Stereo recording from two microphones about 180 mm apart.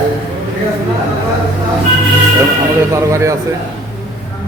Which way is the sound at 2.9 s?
15° right (ahead or behind).